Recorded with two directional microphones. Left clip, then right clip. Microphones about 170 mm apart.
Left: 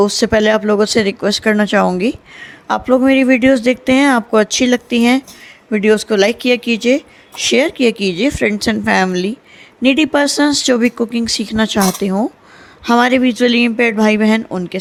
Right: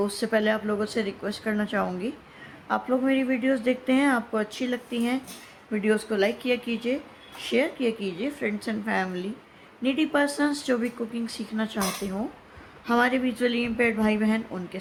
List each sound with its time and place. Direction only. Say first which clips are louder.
0.0 s speech: left 13 dB; 50° left (ahead or behind)